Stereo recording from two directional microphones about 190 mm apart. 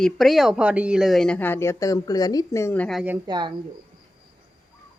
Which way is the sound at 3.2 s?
25° right (ahead or behind).